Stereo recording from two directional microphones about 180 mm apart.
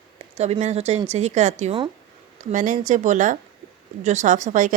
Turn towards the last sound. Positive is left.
turn(degrees=-45)  # may be behind; listen again after turning